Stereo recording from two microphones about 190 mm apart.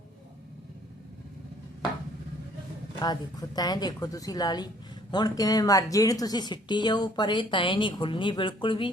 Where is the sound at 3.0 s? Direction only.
20° left (ahead or behind).